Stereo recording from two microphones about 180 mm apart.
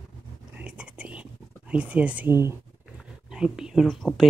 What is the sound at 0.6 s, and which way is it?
Whispering, 5° right (ahead or behind).